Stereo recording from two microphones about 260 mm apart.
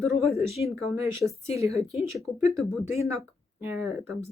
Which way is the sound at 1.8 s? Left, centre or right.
Left.